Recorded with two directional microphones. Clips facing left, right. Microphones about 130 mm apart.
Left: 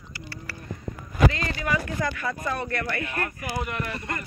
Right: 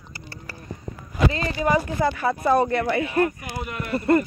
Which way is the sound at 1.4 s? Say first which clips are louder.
Right 6 dB; 30° right (ahead or behind).